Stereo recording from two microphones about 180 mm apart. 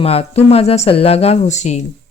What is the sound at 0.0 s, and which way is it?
Speech, 35° left (ahead or behind).